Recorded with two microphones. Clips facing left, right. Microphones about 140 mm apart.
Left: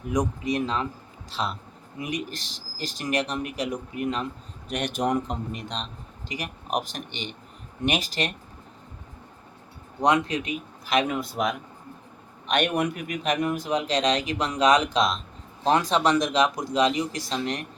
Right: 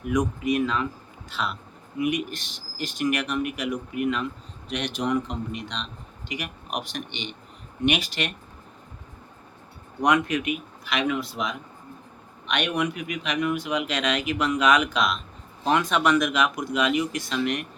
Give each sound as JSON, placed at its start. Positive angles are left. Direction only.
{"t": 0.1, "sound": "speech", "side_deg": 35}
{"t": 4.7, "sound": "a man's voice", "side_deg": 45}
{"t": 10.0, "sound": "speech", "side_deg": 30}